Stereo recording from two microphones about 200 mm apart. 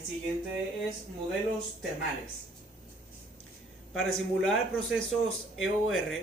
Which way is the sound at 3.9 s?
Centre (ahead or behind).